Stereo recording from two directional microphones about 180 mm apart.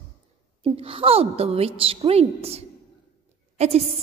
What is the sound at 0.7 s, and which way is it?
A woman's voice, 30° right (ahead or behind).